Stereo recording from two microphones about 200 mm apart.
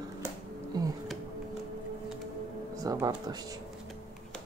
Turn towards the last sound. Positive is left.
turn(degrees=-20)  # may be behind; listen again after turning